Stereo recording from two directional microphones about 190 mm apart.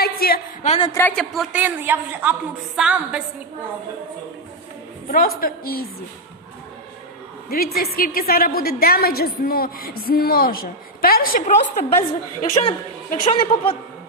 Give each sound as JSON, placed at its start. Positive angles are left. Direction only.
{"t": 0.0, "sound": "a sound", "side_deg": 50}
{"t": 0.6, "sound": "a woman's voice", "side_deg": 35}
{"t": 0.9, "sound": "a woman's voice", "side_deg": 5}
{"t": 1.6, "sound": "a woman's voice", "side_deg": -10}
{"t": 5.1, "sound": "a woman's voice", "side_deg": 50}
{"t": 7.5, "sound": "a woman's voice", "side_deg": 50}
{"t": 12.6, "sound": "a woman's voice", "side_deg": 30}